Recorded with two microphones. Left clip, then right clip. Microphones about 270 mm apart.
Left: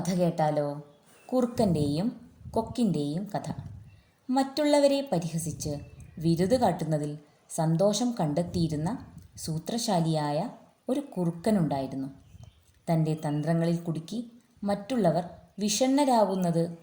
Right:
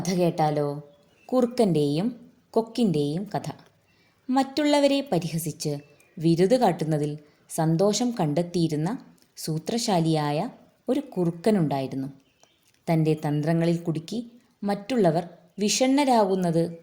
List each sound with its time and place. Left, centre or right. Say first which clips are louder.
0.1 s a woman's voice: right 3 dB; right